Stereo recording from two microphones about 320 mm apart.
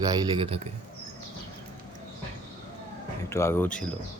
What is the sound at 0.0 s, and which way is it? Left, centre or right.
Speech, centre.